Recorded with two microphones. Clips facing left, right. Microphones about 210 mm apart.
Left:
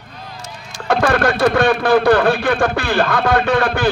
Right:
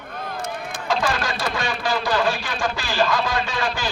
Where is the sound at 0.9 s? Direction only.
60° left (ahead or behind).